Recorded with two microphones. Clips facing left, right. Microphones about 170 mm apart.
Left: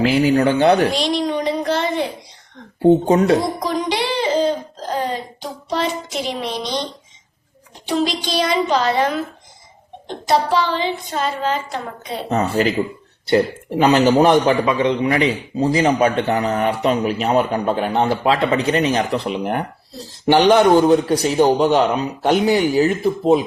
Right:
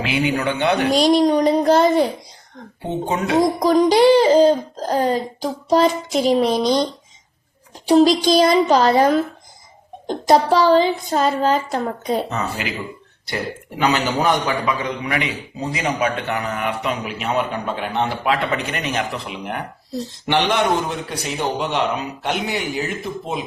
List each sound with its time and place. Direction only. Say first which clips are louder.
0.0 s a man's voice: left 6 dB; 35° left (ahead or behind)
0.9 s a child's voice: right 5 dB; 40° right (ahead or behind)
2.8 s a man's voice: left 10 dB; 35° left (ahead or behind)
3.6 s a child's voice: right 8 dB; 40° right (ahead or behind)
7.9 s a child's voice: right 7 dB; 40° right (ahead or behind)
12.3 s a man's voice: left 7 dB; 35° left (ahead or behind)
13.8 s a man's voice: left 6 dB; 30° left (ahead or behind)